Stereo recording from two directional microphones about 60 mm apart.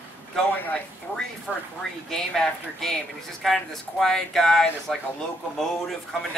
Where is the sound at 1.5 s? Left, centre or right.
Centre.